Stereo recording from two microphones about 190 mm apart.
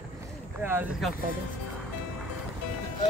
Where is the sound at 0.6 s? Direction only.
10° right (ahead or behind).